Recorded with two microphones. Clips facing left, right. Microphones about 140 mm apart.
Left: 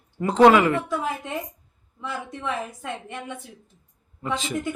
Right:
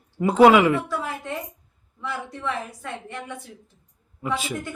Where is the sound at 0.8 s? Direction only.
20° left (ahead or behind).